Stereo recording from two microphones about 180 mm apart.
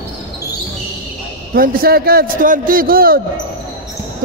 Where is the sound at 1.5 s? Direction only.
50° right (ahead or behind).